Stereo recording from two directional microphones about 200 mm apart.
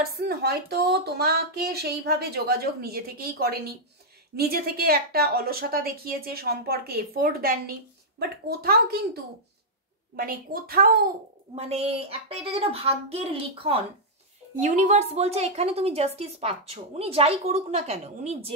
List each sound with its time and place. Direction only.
0.2 s speech: 55° right (ahead or behind)
11.5 s a woman's voice: 30° right (ahead or behind)